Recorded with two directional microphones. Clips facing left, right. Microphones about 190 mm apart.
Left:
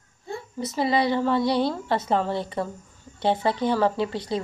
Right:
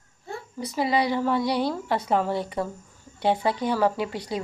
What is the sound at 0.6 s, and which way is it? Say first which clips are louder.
A woman's voice: left 1 dB; 10° right (ahead or behind).